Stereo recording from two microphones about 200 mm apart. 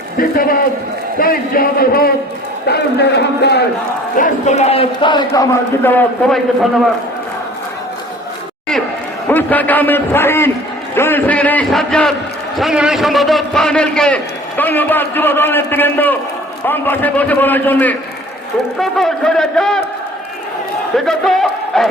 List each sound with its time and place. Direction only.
0.2 s a man's voice: 45° left (ahead or behind)
4.2 s a man's voice: 35° left (ahead or behind); by 6.4 s 5° left (ahead or behind)
9.2 s a man's voice: 10° left (ahead or behind)
10.9 s a sound: 10° left (ahead or behind)
12.5 s a man's voice: centre (ahead or behind)
20.9 s a man's voice: centre (ahead or behind)